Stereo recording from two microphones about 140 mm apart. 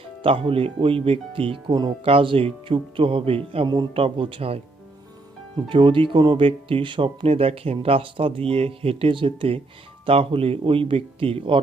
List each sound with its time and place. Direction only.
0.2 s speech: 40° right (ahead or behind)